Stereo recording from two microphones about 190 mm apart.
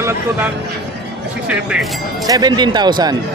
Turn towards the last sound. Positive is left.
turn(degrees=-20)  # may be behind; listen again after turning